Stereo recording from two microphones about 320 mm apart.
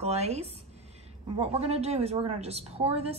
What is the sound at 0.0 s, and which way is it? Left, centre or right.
A woman's voice, centre.